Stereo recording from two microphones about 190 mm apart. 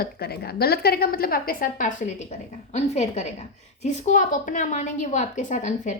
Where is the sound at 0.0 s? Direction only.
55° left (ahead or behind).